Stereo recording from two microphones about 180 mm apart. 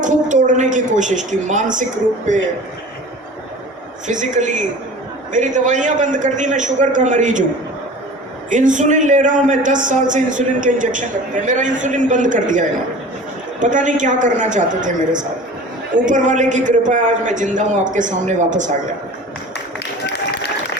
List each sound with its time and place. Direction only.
0.0 s a man's voice: 45° right (ahead or behind)
4.0 s a man's voice: 45° right (ahead or behind)
8.4 s a man's voice: 45° right (ahead or behind)